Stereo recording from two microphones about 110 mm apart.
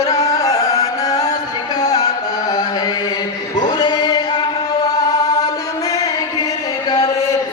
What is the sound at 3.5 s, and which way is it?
Singing, 40° left (ahead or behind).